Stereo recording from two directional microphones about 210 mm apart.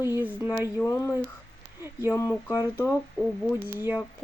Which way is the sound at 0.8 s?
15° left (ahead or behind).